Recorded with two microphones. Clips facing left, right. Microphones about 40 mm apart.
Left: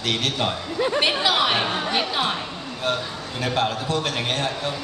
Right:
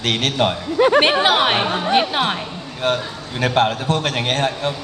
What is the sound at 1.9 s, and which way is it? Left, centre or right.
Speech, right.